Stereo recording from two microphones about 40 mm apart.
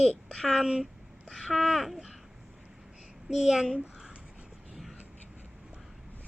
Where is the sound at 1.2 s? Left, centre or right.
Centre.